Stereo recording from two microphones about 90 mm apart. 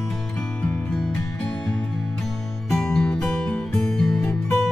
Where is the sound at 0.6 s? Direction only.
10° left (ahead or behind).